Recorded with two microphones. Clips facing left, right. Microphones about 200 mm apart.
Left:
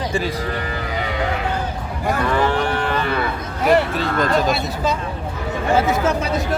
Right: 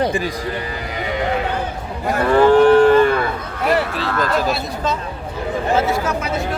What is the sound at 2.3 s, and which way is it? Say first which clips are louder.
Moo: right 13 dB; 45° right (ahead or behind).